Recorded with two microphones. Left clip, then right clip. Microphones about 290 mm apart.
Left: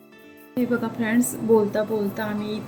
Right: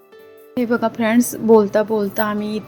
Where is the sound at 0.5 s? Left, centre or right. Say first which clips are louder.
Right 6 dB; right.